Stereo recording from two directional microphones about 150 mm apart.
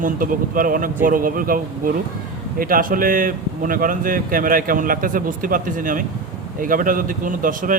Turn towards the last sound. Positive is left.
turn(degrees=-65)  # may be behind; listen again after turning